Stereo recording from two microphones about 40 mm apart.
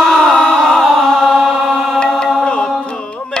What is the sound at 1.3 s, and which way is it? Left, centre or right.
Chant, centre.